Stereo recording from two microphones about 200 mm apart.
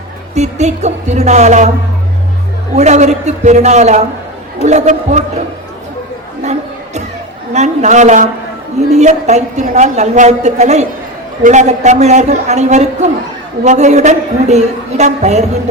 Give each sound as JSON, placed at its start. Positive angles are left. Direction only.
{"t": 0.3, "sound": "a woman's voice", "side_deg": -35}
{"t": 2.7, "sound": "a woman's voice", "side_deg": -35}
{"t": 6.4, "sound": "a sound", "side_deg": -35}
{"t": 7.5, "sound": "a woman's voice", "side_deg": -35}